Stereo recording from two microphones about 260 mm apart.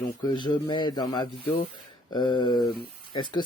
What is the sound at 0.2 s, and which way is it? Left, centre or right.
Speech, centre.